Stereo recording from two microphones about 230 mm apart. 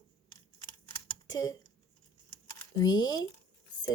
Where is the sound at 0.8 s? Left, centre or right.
Centre.